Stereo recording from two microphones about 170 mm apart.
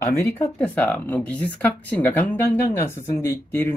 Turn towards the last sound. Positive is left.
turn(degrees=15)  # may be behind; listen again after turning